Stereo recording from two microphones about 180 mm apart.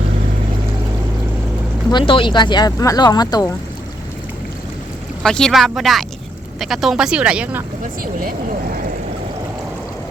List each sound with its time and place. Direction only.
1.9 s speech: 25° left (ahead or behind)
5.2 s speech: 5° left (ahead or behind)